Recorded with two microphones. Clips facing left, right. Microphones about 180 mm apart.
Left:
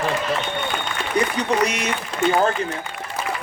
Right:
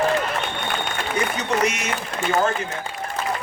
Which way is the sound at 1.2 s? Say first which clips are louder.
Left 4 dB; 35° left (ahead or behind).